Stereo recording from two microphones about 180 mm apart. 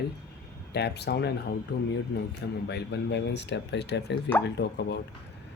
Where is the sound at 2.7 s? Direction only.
70° left (ahead or behind).